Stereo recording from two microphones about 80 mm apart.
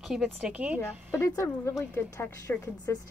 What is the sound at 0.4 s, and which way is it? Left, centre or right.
Speech, centre.